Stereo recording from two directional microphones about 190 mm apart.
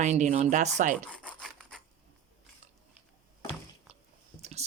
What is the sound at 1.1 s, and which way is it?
Rub, 5° left (ahead or behind).